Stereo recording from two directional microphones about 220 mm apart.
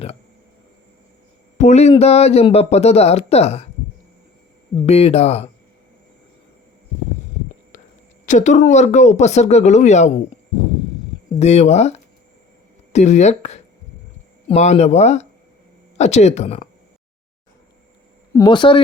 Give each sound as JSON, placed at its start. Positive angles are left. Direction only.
{"t": 1.5, "sound": "speech", "side_deg": 30}
{"t": 4.9, "sound": "speech", "side_deg": 30}
{"t": 8.3, "sound": "speech", "side_deg": 35}
{"t": 11.3, "sound": "speech", "side_deg": 30}
{"t": 18.3, "sound": "speech", "side_deg": 20}